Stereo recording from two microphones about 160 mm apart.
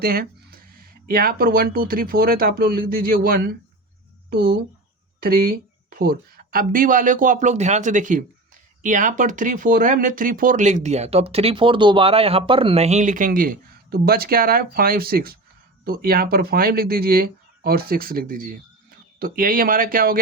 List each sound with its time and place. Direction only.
0.0 s speech: 70° right (ahead or behind)